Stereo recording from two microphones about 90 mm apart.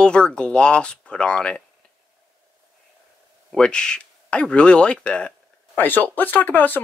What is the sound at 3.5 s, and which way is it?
Speech, 10° left (ahead or behind).